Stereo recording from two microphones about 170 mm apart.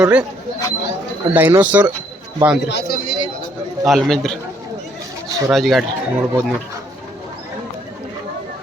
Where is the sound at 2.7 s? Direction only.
75° left (ahead or behind).